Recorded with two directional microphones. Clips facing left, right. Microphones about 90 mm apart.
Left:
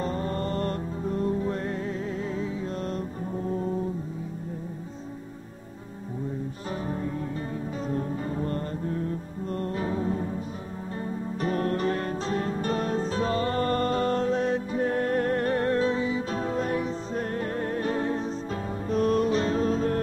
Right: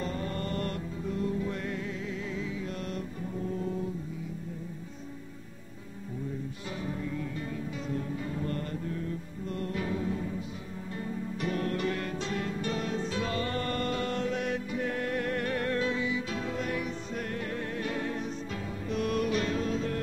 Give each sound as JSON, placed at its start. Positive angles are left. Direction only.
{"t": 0.0, "sound": "music", "side_deg": 35}
{"t": 3.4, "sound": "brass instrument", "side_deg": 35}
{"t": 6.9, "sound": "music", "side_deg": 35}
{"t": 11.4, "sound": "music", "side_deg": 40}